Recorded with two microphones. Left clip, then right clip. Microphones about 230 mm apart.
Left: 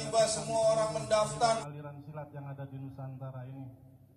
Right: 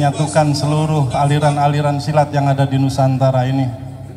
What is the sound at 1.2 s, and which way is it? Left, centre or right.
Speech, left.